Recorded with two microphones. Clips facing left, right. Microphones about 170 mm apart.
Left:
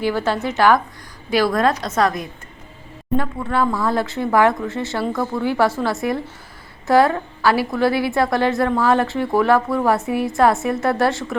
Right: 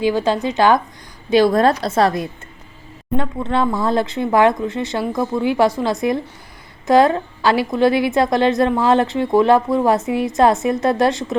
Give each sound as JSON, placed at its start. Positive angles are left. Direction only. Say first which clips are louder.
{"t": 0.0, "sound": "a woman's voice", "louder": "right 3 dB", "side_deg": -15}